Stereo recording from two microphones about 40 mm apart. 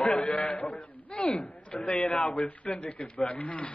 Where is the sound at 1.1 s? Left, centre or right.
Left.